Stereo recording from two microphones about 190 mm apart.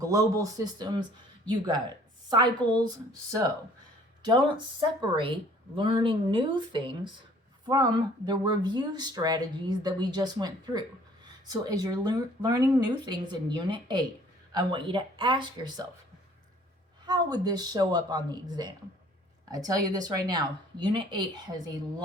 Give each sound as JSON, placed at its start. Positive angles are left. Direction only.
{"t": 0.0, "sound": "speech", "side_deg": -20}
{"t": 4.3, "sound": "speech", "side_deg": -25}
{"t": 8.3, "sound": "speech", "side_deg": -20}
{"t": 17.1, "sound": "speech", "side_deg": -20}